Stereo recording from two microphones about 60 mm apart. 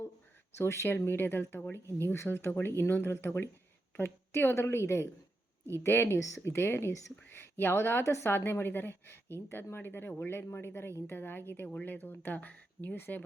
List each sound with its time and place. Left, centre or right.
0.5 s a woman's voice: left
0.9 s a woman's voice: left